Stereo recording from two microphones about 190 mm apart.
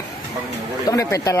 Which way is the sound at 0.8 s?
20° left (ahead or behind).